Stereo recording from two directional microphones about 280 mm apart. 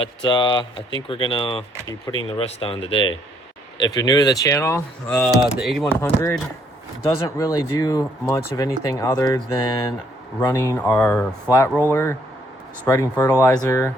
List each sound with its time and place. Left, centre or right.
0.3 s speech: centre